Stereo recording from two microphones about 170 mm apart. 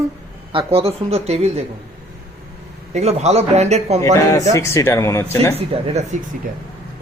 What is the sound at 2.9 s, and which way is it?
A man's voice, 40° right (ahead or behind).